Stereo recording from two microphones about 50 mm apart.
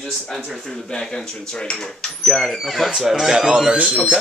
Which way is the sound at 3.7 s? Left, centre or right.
Right.